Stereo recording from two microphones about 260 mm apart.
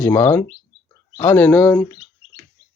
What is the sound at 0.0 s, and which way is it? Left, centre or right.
Speech, centre.